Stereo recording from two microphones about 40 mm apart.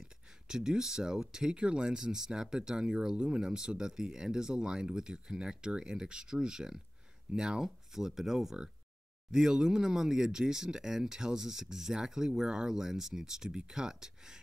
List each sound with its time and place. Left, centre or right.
0.0 s speech: centre